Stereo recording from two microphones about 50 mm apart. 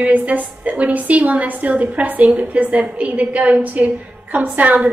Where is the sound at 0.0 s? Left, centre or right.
Right.